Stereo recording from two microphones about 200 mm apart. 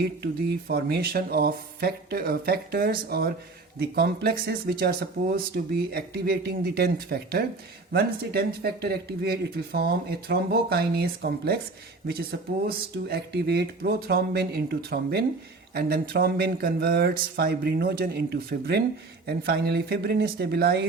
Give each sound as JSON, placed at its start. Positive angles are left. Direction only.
{"t": 0.7, "sound": "speech", "side_deg": -50}